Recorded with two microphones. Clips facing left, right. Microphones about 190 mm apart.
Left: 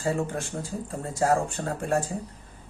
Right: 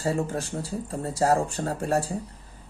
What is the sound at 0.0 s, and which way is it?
Speech, 35° right (ahead or behind).